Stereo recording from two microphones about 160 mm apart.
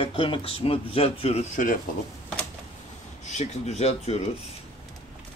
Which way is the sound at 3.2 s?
45° left (ahead or behind).